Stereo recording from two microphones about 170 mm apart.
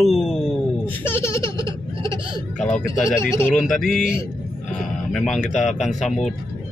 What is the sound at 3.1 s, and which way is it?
Speech, 15° left (ahead or behind).